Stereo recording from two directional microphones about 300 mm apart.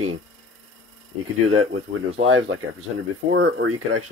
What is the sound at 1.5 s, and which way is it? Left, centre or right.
Speech, right.